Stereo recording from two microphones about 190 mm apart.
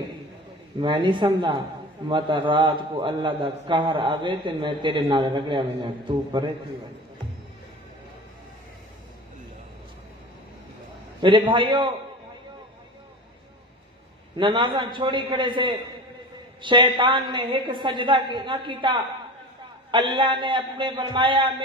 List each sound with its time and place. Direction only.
0.7 s a man's voice: 25° right (ahead or behind)
11.1 s a man's voice: 25° right (ahead or behind)
14.3 s a man's voice: 25° right (ahead or behind)